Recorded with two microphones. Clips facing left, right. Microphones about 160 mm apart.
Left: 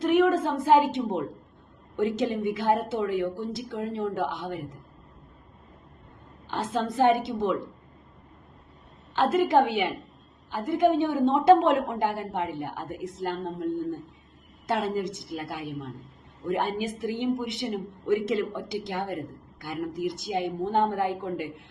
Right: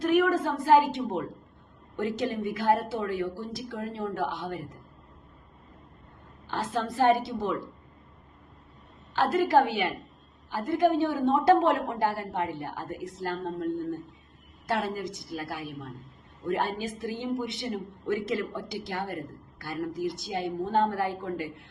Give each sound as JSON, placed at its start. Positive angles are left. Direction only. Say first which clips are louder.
{"t": 0.0, "sound": "a woman's voice", "louder": "left 2 dB", "side_deg": 25}
{"t": 6.5, "sound": "speech", "louder": "left 2 dB", "side_deg": 20}
{"t": 9.1, "sound": "speech", "louder": "left 1 dB", "side_deg": 20}
{"t": 14.7, "sound": "speech", "louder": "left 3 dB", "side_deg": 20}